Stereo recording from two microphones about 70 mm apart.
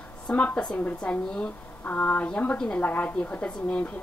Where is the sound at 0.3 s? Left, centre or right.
Centre.